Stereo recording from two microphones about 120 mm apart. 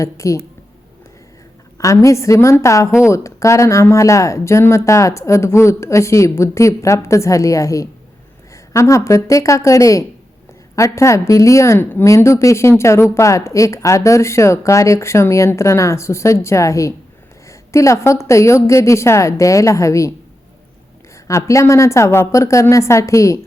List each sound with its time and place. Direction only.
0.0 s speech: 25° left (ahead or behind)
1.8 s speech: 25° left (ahead or behind)
21.2 s speech: 25° left (ahead or behind)